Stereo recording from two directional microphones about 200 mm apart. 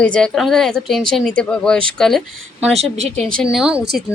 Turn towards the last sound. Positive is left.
turn(degrees=-5)  # may be behind; listen again after turning